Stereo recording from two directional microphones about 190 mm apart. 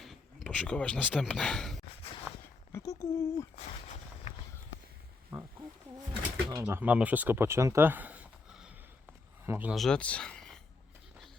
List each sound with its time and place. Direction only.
0.0 s speech: centre (ahead or behind)
2.7 s speech: 15° left (ahead or behind)
3.8 s a sound: 40° left (ahead or behind)
5.3 s wild animals: 10° right (ahead or behind)
6.5 s speech: 15° right (ahead or behind); by 10.6 s 5° left (ahead or behind)